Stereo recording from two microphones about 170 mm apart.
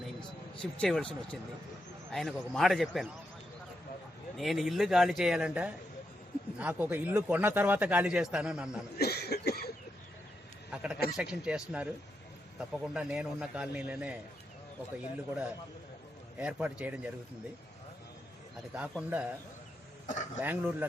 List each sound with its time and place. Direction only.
0.6 s a man's voice: 5° left (ahead or behind)
4.4 s a man's voice: centre (ahead or behind)
9.0 s cough: 70° left (ahead or behind)
10.7 s a man's voice: 5° right (ahead or behind)
16.4 s speech: 5° right (ahead or behind)
18.7 s speech: 5° right (ahead or behind)
20.1 s speech: 45° left (ahead or behind)
20.4 s speech: 10° right (ahead or behind)